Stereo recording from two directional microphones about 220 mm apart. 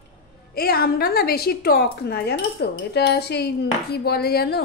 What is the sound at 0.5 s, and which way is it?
A woman's voice, 45° left (ahead or behind).